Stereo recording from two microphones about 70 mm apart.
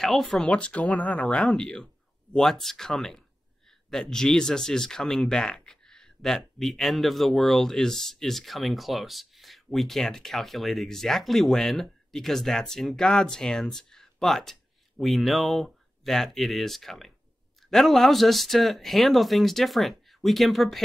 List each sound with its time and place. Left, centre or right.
0.0 s speech: centre
0.5 s speech: centre
1.4 s speech: centre